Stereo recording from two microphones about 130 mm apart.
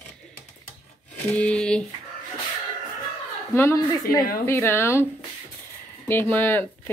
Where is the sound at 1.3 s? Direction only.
10° left (ahead or behind).